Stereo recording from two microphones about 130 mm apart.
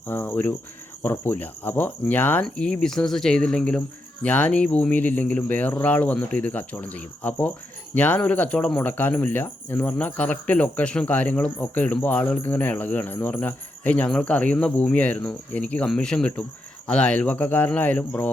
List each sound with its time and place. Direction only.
0.1 s speech: 15° left (ahead or behind)